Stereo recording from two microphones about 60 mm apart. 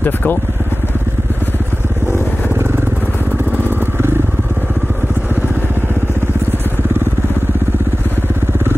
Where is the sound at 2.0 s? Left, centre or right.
Right.